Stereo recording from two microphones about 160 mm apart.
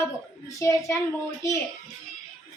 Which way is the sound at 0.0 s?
20° left (ahead or behind).